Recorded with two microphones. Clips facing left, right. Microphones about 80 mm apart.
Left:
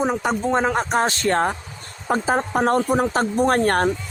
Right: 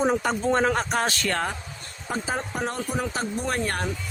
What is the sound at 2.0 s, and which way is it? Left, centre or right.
Speech, left.